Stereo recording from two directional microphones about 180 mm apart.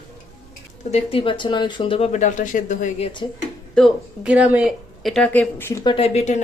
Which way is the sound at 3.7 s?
Centre (ahead or behind).